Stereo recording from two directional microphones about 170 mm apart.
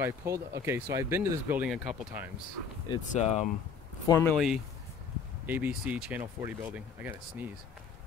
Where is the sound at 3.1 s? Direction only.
40° left (ahead or behind).